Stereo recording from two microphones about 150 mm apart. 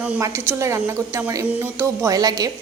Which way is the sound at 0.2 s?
20° right (ahead or behind).